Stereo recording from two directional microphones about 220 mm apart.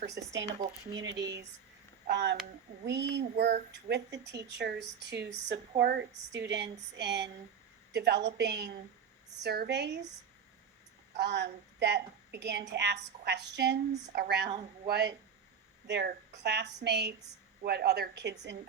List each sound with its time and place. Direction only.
0.1 s speech: 15° right (ahead or behind)
0.9 s a woman's voice: 55° right (ahead or behind)
11.2 s a woman's voice: 50° right (ahead or behind)